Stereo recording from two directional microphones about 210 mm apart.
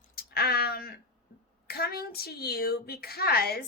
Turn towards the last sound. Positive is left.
turn(degrees=45)  # may be behind; listen again after turning